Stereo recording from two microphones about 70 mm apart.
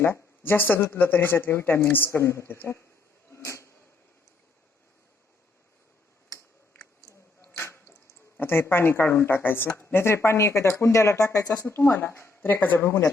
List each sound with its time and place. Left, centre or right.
0.0 s speech: left
2.0 s speech: left
3.3 s a sound: left
7.5 s drip: left
8.4 s speech: left
11.8 s speech: left